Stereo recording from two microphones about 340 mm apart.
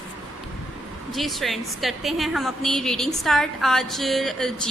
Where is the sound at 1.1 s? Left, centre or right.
Centre.